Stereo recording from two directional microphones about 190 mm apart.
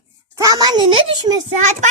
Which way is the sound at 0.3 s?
20° right (ahead or behind).